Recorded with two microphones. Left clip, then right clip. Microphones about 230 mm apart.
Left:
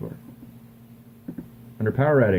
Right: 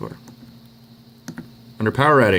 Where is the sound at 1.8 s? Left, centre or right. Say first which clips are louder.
Right 5 dB; right.